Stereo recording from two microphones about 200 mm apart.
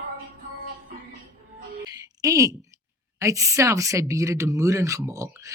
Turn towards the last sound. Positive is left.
turn(degrees=-15)  # may be behind; listen again after turning